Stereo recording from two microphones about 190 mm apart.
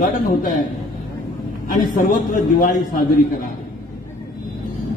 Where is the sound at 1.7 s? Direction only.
45° left (ahead or behind).